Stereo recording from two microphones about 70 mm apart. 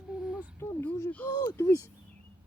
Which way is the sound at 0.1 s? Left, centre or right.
Centre.